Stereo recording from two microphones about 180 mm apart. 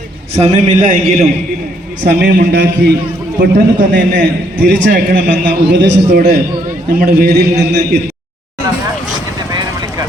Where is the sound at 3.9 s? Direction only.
80° right.